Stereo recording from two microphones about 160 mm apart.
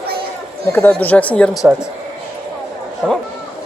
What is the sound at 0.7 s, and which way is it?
Speech, 10° left (ahead or behind).